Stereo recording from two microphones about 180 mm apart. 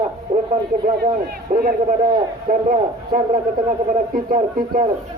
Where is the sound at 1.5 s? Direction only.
55° right (ahead or behind).